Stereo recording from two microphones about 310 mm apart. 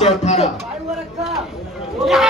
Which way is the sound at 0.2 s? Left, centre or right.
Left.